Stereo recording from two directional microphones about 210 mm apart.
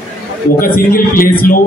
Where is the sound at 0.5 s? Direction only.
45° left (ahead or behind).